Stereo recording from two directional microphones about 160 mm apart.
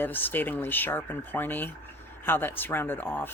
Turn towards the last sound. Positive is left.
turn(degrees=10)  # may be behind; listen again after turning